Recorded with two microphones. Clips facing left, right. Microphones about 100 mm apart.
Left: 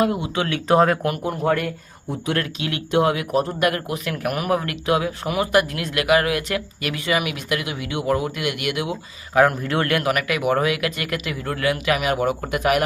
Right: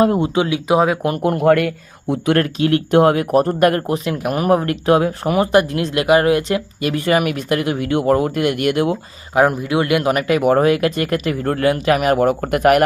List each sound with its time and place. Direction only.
0.0 s speech: 35° right (ahead or behind)
0.3 s a man's voice: 15° right (ahead or behind)
1.2 s a man's voice: 70° right (ahead or behind)
2.3 s speech: 45° right (ahead or behind)
4.0 s speech: 25° right (ahead or behind)
7.0 s speech: 45° right (ahead or behind)
9.3 s a man's voice: 20° right (ahead or behind)
10.0 s speech: 30° right (ahead or behind); by 12.8 s 50° right (ahead or behind)